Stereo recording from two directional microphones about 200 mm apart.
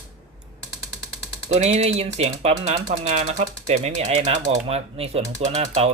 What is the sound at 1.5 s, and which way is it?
Speech, 35° right (ahead or behind).